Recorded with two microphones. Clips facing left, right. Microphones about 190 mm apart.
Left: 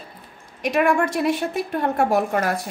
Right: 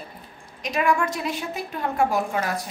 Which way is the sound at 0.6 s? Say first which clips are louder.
Left 4 dB; 55° left (ahead or behind).